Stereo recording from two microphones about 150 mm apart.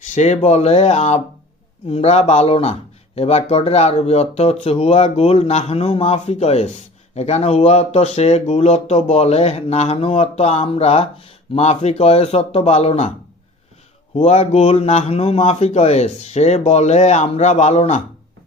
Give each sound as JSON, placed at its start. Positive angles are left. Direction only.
{"t": 0.0, "sound": "speech", "side_deg": 50}
{"t": 14.2, "sound": "speech", "side_deg": 45}